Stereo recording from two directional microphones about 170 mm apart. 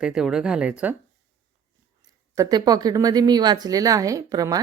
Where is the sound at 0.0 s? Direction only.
5° right (ahead or behind).